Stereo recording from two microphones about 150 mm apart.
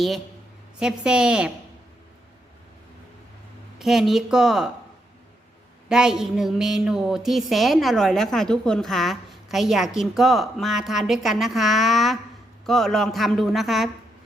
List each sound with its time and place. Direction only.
0.8 s speech: 5° right (ahead or behind)
3.8 s speech: centre (ahead or behind)
5.9 s speech: 5° right (ahead or behind)